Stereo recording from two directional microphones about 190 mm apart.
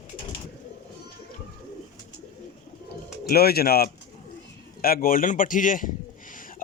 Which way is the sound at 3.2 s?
55° left (ahead or behind).